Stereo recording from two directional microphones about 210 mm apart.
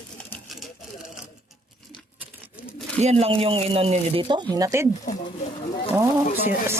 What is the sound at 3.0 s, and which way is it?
Speech, 30° right (ahead or behind).